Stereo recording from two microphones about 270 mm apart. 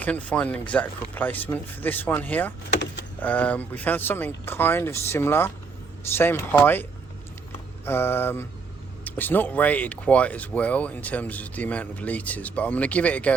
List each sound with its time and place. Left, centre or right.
0.0 s speech: centre
2.6 s vehicle: left
3.2 s speech: centre
7.9 s speech: centre